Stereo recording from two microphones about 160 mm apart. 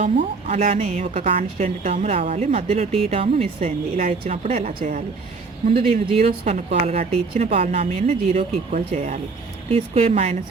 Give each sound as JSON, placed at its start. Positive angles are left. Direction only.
{"t": 0.0, "sound": "a woman's voice", "side_deg": -55}
{"t": 1.3, "sound": "a woman's voice", "side_deg": -40}
{"t": 1.9, "sound": "speech", "side_deg": -35}
{"t": 4.8, "sound": "a woman's voice", "side_deg": -55}
{"t": 5.9, "sound": "speech", "side_deg": -40}
{"t": 9.6, "sound": "speech", "side_deg": -35}